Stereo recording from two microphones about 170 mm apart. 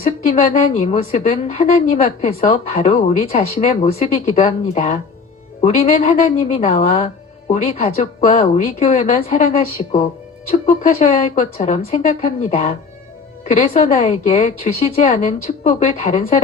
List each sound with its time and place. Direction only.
0.0 s a woman's voice: 40° left (ahead or behind)